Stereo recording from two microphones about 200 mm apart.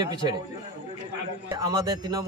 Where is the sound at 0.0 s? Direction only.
20° right (ahead or behind).